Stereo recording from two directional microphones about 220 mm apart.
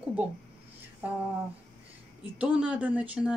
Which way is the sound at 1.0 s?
5° right (ahead or behind).